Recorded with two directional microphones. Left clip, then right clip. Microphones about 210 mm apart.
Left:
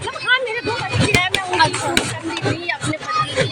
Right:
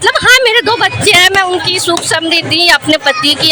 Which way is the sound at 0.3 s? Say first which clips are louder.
Right 10 dB; 55° right (ahead or behind).